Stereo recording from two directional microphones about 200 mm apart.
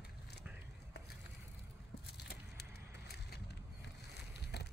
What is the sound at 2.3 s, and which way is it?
Vehicle, 55° left (ahead or behind).